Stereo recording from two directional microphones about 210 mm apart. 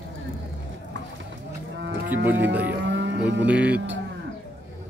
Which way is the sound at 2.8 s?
55° right (ahead or behind).